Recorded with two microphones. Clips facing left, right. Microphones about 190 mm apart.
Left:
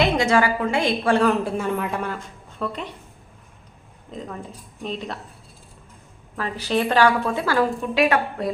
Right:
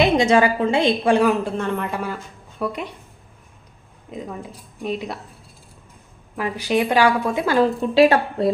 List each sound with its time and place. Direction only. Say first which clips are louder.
0.0 s a woman's voice: right 3 dB; 20° right (ahead or behind)
1.3 s speech: right 1 dB; 5° left (ahead or behind); by 2.9 s 10° right (ahead or behind)
4.1 s a woman's voice: right 2 dB; 10° right (ahead or behind)
6.3 s a woman's voice: right 2 dB; 15° right (ahead or behind); by 8.5 s 30° right (ahead or behind)